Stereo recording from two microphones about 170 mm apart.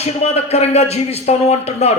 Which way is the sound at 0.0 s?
40° left (ahead or behind).